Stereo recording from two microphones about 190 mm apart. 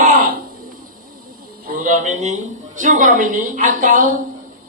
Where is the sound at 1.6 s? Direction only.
45° right (ahead or behind).